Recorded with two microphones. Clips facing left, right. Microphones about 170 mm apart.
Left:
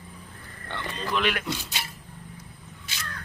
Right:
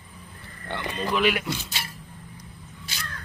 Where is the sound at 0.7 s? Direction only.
15° right (ahead or behind).